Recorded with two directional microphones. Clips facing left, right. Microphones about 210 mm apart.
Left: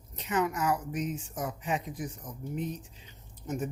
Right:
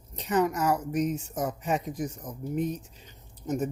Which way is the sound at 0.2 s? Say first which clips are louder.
Right 4 dB; 40° right (ahead or behind).